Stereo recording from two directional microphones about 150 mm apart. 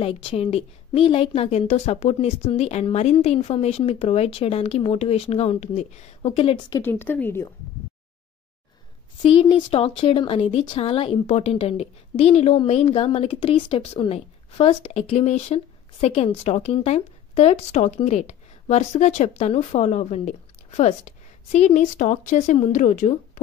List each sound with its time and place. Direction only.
0.0 s speech: 40° left (ahead or behind)
6.7 s a woman's voice: 15° left (ahead or behind)
9.2 s speech: 35° left (ahead or behind); by 23.4 s 55° left (ahead or behind)